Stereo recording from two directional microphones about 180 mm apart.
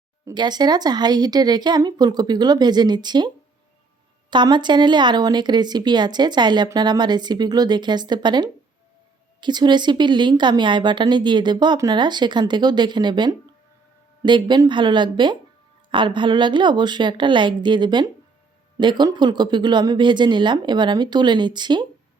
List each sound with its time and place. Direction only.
0.3 s a woman's voice: 25° right (ahead or behind)